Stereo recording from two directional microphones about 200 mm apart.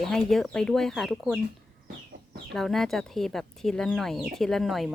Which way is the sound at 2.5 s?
Centre (ahead or behind).